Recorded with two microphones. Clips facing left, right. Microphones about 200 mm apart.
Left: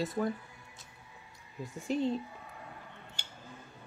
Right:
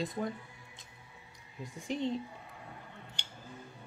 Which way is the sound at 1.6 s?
15° right (ahead or behind).